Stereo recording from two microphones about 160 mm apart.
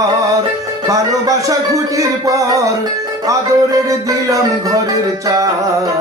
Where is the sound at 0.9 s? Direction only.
20° right (ahead or behind).